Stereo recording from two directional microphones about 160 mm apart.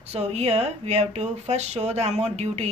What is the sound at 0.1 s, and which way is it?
Speech, 40° right (ahead or behind).